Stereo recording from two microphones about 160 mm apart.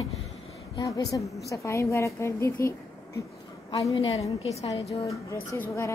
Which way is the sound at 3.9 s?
35° left (ahead or behind).